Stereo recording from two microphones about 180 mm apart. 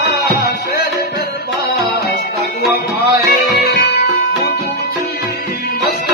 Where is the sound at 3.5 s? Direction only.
60° left (ahead or behind).